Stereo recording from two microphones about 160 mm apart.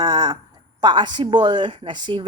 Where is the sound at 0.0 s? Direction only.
25° right (ahead or behind).